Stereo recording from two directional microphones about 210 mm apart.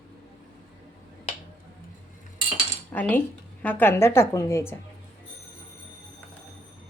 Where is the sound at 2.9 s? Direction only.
10° left (ahead or behind).